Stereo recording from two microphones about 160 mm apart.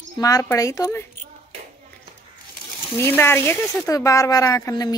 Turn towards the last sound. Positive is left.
turn(degrees=20)  # may be behind; listen again after turning